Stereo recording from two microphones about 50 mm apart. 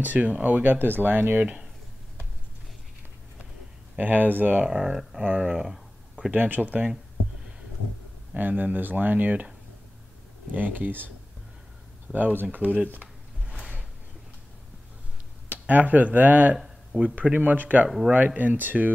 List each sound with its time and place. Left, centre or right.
0.0 s speech: right
4.0 s speech: right
4.6 s speech: centre
5.2 s speech: right
5.5 s speech: centre
6.3 s speech: right
8.4 s speech: right
10.5 s speech: right
12.1 s speech: right
15.5 s speech: right
17.8 s speech: centre
18.1 s speech: right